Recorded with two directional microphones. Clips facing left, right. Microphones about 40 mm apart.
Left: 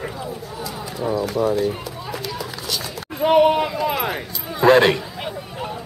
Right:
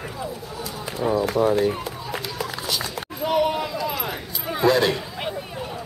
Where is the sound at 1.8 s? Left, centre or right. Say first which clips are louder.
Left 1 dB; right.